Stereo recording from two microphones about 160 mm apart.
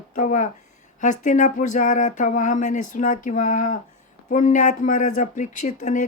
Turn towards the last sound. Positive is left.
turn(degrees=50)  # may be behind; listen again after turning